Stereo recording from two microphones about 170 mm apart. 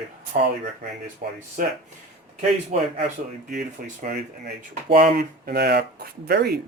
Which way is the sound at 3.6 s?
50° right (ahead or behind).